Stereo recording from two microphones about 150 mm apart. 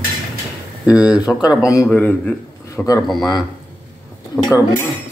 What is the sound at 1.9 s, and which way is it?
Speech, 10° left (ahead or behind).